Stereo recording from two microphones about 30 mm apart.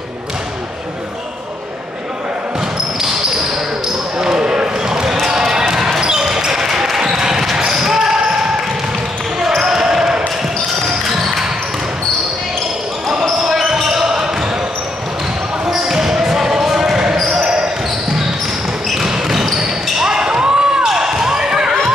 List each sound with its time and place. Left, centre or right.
4.2 s basketball bounce: right
9.6 s basketball bounce: right
10.8 s basketball bounce: centre
13.4 s basketball bounce: centre
14.0 s basketball bounce: right
15.7 s basketball bounce: centre
18.9 s basketball bounce: centre
20.1 s basketball bounce: right